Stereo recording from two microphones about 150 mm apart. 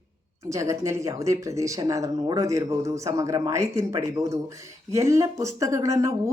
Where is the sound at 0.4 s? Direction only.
20° right (ahead or behind).